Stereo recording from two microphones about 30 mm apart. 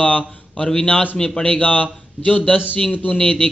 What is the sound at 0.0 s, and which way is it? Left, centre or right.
Speech, left.